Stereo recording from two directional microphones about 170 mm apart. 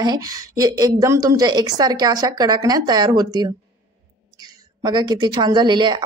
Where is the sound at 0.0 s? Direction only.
20° right (ahead or behind).